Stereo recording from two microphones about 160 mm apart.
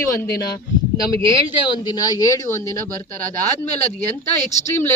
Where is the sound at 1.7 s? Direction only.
25° left (ahead or behind).